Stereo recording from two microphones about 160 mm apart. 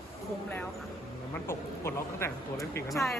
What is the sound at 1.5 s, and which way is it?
Speech, 15° left (ahead or behind).